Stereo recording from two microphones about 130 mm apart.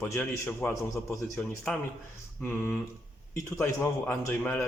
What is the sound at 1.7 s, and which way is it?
Speech, 5° left (ahead or behind).